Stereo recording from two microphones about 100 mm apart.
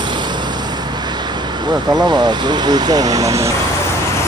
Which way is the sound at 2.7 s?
40° right (ahead or behind).